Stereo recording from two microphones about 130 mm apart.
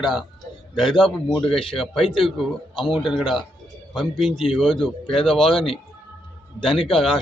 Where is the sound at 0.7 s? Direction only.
40° left (ahead or behind).